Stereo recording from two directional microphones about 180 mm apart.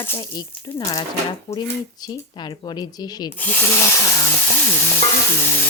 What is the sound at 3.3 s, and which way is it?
Speech, 10° left (ahead or behind).